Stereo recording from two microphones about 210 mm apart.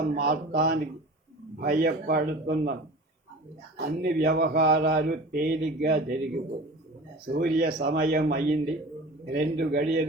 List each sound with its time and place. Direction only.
0.1 s speech: 45° right (ahead or behind)
3.8 s speech: 45° right (ahead or behind)
7.3 s a man's voice: 45° right (ahead or behind)